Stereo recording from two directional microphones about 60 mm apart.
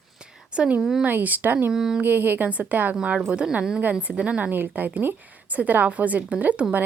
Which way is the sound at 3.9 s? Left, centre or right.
Right.